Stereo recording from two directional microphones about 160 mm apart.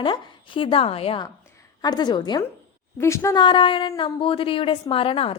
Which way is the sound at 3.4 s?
30° left (ahead or behind).